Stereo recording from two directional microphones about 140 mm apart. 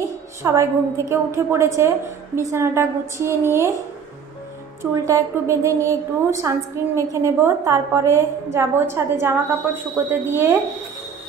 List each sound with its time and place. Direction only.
0.4 s a woman's voice: 20° right (ahead or behind)
5.0 s a woman's voice: 20° right (ahead or behind)